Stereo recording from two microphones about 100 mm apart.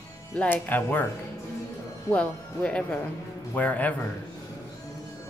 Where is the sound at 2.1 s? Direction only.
10° left (ahead or behind).